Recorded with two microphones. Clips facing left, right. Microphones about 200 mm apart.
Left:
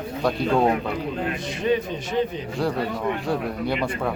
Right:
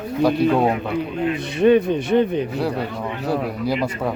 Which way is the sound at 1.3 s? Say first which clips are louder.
Right 10 dB; 60° right (ahead or behind).